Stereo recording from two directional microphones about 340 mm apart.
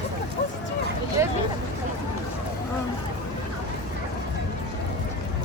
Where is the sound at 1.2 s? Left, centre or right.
Centre.